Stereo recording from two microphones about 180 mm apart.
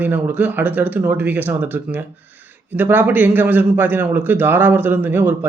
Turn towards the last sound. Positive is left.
turn(degrees=-10)  # may be behind; listen again after turning